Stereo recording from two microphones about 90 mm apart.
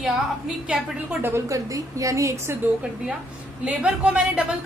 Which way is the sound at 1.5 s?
40° right (ahead or behind).